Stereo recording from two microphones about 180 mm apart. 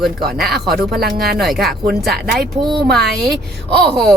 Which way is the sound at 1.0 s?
60° right (ahead or behind).